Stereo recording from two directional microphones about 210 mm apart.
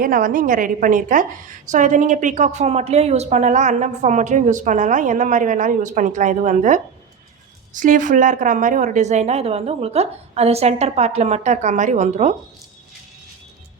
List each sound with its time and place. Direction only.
0.0 s a woman's voice: 40° right (ahead or behind)